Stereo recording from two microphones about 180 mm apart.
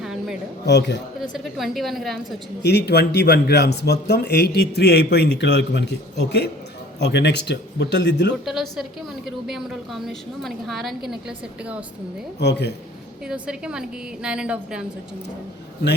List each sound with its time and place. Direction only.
0.0 s a sound: 5° right (ahead or behind)
0.6 s speech: 70° left (ahead or behind)
1.2 s a woman's voice: centre (ahead or behind)
2.6 s speech: 65° left (ahead or behind)
8.7 s a woman's voice: centre (ahead or behind)
12.4 s speech: 70° left (ahead or behind)
13.2 s a woman's voice: 5° right (ahead or behind)